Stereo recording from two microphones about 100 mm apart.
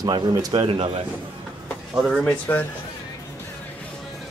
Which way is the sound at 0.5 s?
65° right (ahead or behind).